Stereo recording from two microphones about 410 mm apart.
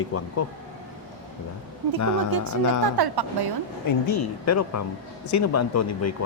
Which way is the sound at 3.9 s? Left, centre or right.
Left.